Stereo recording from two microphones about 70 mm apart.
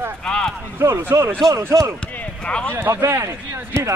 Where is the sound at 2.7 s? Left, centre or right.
Right.